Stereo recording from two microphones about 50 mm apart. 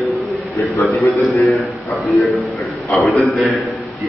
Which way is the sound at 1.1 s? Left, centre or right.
Left.